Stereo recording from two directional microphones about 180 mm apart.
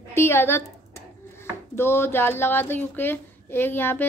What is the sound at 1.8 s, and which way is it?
A woman's voice, 10° left (ahead or behind).